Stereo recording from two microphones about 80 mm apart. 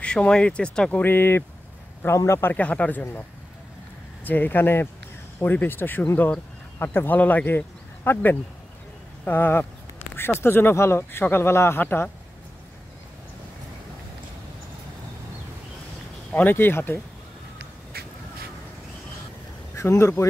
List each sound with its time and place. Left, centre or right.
0.0 s speech: centre
1.0 s a man's voice: left
2.5 s speech: centre
4.2 s speech: left
16.3 s a sound: centre
16.5 s speech: left
19.7 s speech: left